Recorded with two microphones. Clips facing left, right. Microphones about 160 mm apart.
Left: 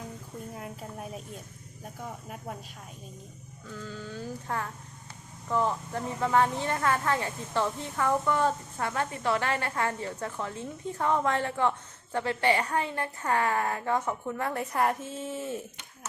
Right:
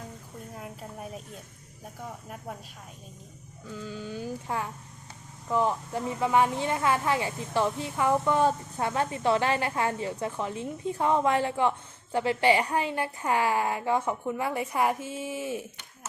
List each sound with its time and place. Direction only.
0.5 s a sound: centre (ahead or behind)
2.0 s speech: centre (ahead or behind)
3.7 s speech: 15° right (ahead or behind)